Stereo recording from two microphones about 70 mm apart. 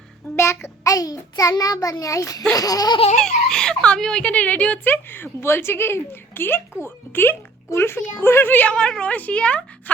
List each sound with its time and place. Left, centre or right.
0.3 s child singing: left
0.9 s a child's voice: left
3.2 s speech: centre
4.9 s a woman's voice: left